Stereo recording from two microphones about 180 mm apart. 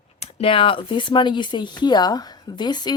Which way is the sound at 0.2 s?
35° left (ahead or behind).